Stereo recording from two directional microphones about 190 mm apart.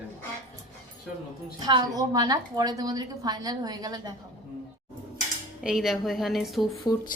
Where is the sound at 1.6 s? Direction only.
20° right (ahead or behind).